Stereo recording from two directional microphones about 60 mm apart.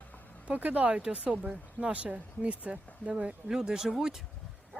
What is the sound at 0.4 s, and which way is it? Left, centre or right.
Speech, right.